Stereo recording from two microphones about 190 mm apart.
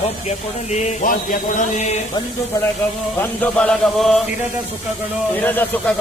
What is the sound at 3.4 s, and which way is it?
Music, 5° left (ahead or behind).